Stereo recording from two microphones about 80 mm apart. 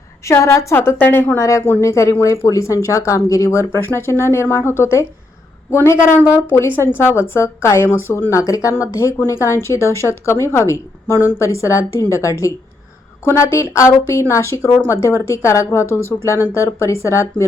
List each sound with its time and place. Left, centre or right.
0.3 s speech: left
0.9 s a woman's voice: left
1.4 s speech: left